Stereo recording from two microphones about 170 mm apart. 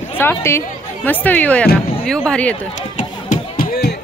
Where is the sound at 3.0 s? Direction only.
50° left (ahead or behind).